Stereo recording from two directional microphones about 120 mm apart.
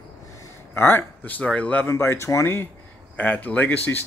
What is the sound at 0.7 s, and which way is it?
Speech, 15° left (ahead or behind).